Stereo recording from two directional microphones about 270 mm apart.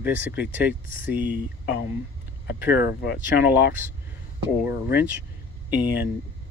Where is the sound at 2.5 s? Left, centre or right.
Centre.